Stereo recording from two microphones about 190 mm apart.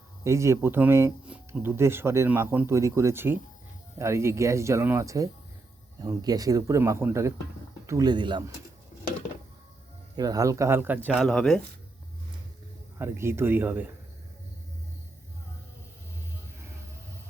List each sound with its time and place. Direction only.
0.3 s speech: 15° right (ahead or behind)
10.2 s speech: 20° right (ahead or behind); by 11.6 s 5° left (ahead or behind)
13.0 s speech: 15° right (ahead or behind)